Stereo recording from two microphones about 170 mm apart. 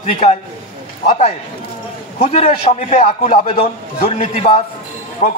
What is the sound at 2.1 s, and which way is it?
A man's voice, 40° left (ahead or behind).